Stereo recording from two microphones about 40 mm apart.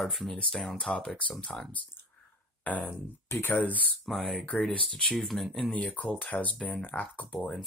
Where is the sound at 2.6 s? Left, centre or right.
Left.